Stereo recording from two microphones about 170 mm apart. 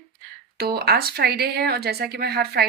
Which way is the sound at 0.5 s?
65° right (ahead or behind).